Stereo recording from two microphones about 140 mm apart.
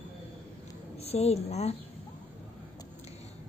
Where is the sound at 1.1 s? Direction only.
50° left (ahead or behind).